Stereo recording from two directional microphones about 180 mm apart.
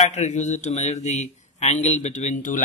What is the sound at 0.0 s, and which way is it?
A man's voice, 40° left (ahead or behind).